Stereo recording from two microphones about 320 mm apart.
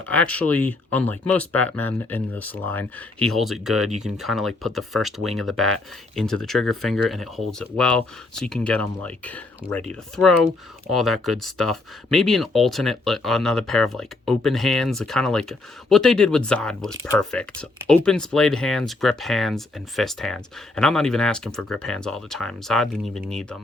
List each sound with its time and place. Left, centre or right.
0.1 s speech: centre